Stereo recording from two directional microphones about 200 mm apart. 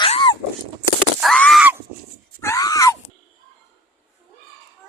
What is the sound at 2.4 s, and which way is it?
Screaming, 15° left (ahead or behind).